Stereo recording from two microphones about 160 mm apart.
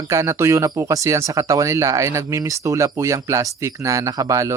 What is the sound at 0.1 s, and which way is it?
Speech, 20° right (ahead or behind).